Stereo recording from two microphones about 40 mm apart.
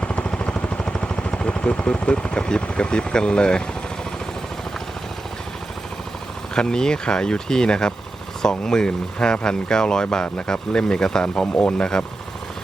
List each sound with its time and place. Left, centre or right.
0.0 s a sound: left
1.4 s vehicle: left
1.8 s speech: left
6.5 s speech: centre